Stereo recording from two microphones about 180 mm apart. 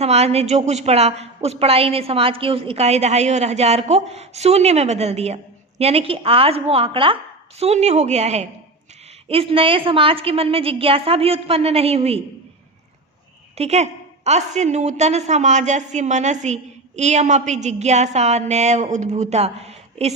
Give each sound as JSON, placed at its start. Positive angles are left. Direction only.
{"t": 0.0, "sound": "a woman's voice", "side_deg": -35}
{"t": 13.6, "sound": "a woman's voice", "side_deg": -35}